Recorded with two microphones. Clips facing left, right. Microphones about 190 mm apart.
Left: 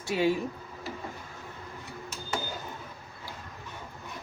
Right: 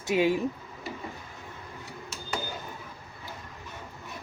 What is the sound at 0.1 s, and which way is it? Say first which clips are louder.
Speech: right 2 dB; 15° right (ahead or behind).